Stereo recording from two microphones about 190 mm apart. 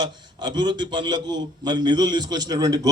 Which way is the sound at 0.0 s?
20° right (ahead or behind).